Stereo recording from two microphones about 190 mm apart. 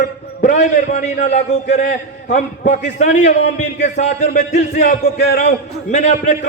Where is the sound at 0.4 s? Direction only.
40° left (ahead or behind).